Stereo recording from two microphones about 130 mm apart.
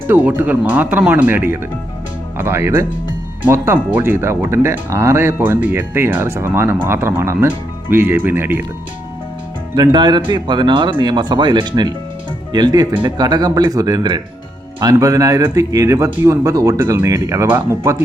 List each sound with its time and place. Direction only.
0.1 s speech: 15° right (ahead or behind)
9.7 s speech: 35° right (ahead or behind); by 17.9 s 15° right (ahead or behind)